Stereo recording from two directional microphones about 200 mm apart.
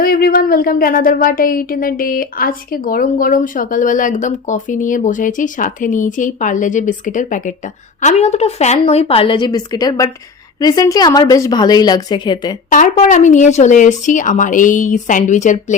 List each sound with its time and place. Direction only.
0.0 s a woman's voice: 50° left (ahead or behind); by 12.5 s 20° left (ahead or behind)
12.7 s a woman's voice: 40° left (ahead or behind)